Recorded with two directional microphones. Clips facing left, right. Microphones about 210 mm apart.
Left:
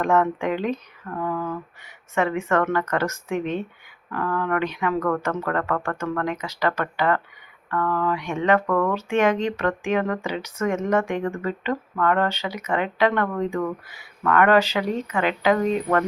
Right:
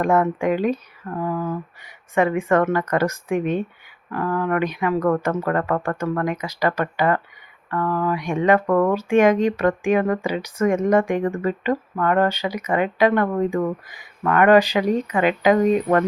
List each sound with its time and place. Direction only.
0.0 s speech: 10° right (ahead or behind)
1.1 s speech: 20° right (ahead or behind)
4.9 s speech: 25° right (ahead or behind)
5.4 s speech: 15° right (ahead or behind)
8.6 s speech: 25° right (ahead or behind)
8.9 s speech: 10° right (ahead or behind)